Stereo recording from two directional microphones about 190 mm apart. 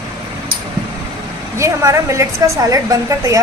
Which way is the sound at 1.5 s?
15° right (ahead or behind).